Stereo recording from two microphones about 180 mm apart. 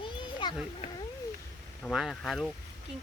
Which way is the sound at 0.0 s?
25° left (ahead or behind).